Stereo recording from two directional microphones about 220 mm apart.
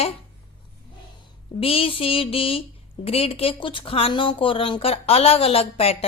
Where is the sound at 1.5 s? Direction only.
25° left (ahead or behind).